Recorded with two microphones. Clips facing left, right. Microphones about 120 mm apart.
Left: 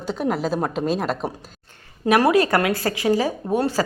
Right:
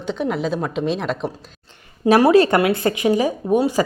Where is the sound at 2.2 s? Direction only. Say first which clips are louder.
Right 4 dB; 25° right (ahead or behind).